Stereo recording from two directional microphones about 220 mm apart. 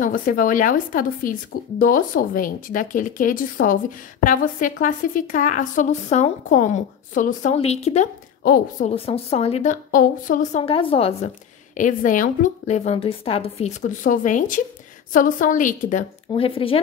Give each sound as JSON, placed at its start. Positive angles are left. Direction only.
{"t": 0.0, "sound": "speech", "side_deg": 40}
{"t": 8.9, "sound": "a woman's voice", "side_deg": 25}
{"t": 16.3, "sound": "a woman's voice", "side_deg": 25}